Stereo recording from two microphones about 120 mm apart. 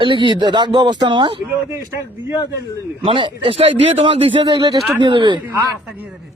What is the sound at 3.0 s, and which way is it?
A man's voice, 45° right (ahead or behind).